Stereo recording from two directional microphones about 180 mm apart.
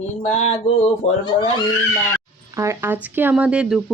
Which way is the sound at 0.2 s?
40° left (ahead or behind).